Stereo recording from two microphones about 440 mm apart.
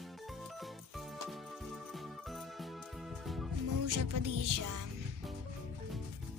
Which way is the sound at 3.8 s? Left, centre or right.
Right.